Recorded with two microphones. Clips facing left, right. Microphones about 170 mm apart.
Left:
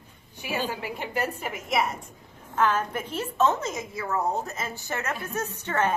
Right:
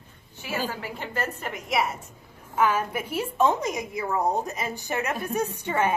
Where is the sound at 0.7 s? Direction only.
15° left (ahead or behind).